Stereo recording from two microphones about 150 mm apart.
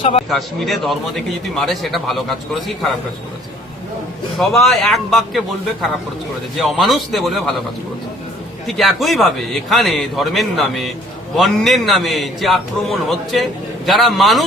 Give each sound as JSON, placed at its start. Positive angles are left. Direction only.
{"t": 0.0, "sound": "speech", "side_deg": 40}
{"t": 0.3, "sound": "a man's voice", "side_deg": 0}
{"t": 4.4, "sound": "a man's voice", "side_deg": 0}
{"t": 8.6, "sound": "a man's voice", "side_deg": 0}